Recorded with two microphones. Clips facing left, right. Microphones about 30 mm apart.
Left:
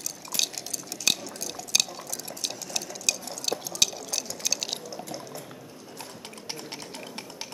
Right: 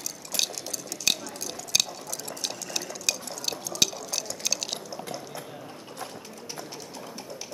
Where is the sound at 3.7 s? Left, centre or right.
Centre.